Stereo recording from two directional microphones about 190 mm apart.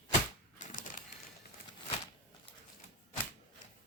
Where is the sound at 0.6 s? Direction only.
45° left (ahead or behind).